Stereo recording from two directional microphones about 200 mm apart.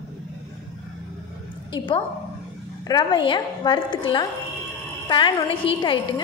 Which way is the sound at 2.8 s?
20° left (ahead or behind).